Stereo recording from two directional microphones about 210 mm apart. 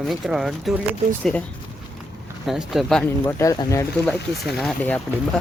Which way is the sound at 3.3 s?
15° left (ahead or behind).